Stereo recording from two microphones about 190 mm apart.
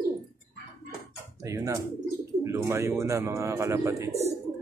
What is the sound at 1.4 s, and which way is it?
Speech, 15° right (ahead or behind).